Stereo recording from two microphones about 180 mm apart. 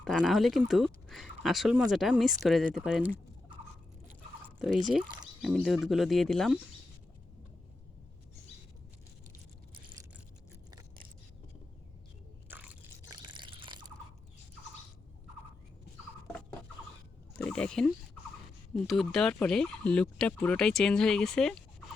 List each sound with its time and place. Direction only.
0.0 s speech: centre (ahead or behind)
4.8 s speech: centre (ahead or behind)
12.5 s biting: 10° right (ahead or behind)
13.1 s drip: 25° right (ahead or behind)
17.3 s speech: 5° left (ahead or behind)